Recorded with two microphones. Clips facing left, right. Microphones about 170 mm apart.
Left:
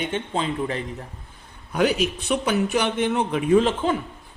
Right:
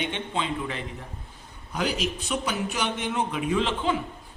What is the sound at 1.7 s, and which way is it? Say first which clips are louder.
Speech: left 7 dB; 60° left (ahead or behind).